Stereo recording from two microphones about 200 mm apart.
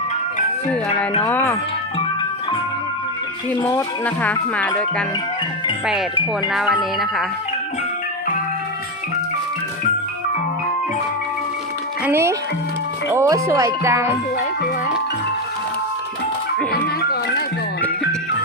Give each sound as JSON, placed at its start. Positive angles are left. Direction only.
{"t": 1.2, "sound": "speech", "side_deg": 10}
{"t": 3.5, "sound": "speech", "side_deg": 10}
{"t": 12.0, "sound": "speech", "side_deg": -15}
{"t": 16.7, "sound": "music", "side_deg": 50}